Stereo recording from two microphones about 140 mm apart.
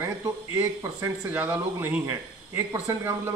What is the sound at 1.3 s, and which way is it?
Speech, 15° right (ahead or behind).